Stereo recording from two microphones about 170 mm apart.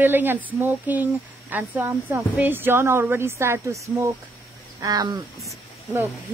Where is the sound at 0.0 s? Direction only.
10° right (ahead or behind).